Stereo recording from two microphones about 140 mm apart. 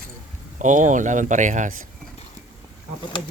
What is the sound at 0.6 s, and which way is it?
Speech, 60° right (ahead or behind).